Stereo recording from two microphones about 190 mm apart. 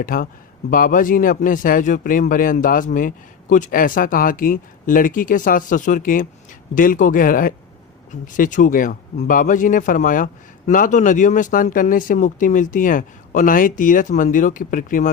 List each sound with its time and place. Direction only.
0.0 s a man's voice: 45° left (ahead or behind)